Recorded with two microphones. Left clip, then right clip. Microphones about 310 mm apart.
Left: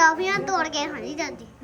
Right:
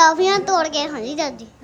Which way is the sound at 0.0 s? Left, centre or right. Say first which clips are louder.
Right 5 dB; centre.